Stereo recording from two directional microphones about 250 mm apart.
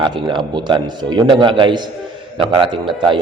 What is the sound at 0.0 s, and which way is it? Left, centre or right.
A man's voice, centre.